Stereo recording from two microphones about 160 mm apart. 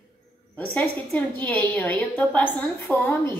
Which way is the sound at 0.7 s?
10° left (ahead or behind).